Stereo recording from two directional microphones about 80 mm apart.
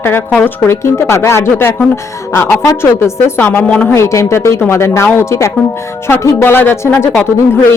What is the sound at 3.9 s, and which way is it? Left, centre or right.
A woman's voice, left.